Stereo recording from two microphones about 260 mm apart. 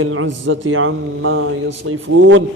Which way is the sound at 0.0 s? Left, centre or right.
Right.